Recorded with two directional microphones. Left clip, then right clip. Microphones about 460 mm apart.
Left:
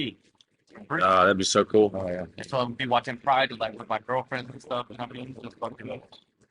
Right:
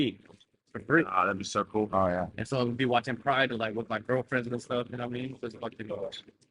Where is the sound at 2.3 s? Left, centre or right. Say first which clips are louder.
Left 2 dB; centre.